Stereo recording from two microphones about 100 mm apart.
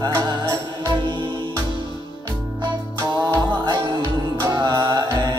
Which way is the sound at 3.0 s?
45° right (ahead or behind).